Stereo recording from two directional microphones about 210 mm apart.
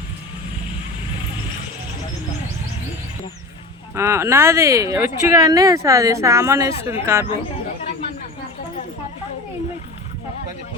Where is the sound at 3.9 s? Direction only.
10° right (ahead or behind).